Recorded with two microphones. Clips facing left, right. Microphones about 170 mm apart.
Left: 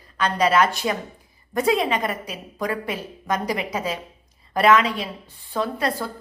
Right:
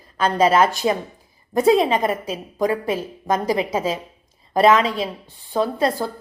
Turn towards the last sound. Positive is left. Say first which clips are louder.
# right 4 dB
turn(degrees=-30)  # may be behind; listen again after turning